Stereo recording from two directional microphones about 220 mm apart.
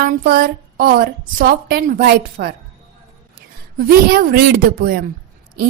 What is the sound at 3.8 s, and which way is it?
A woman's voice, 40° right (ahead or behind).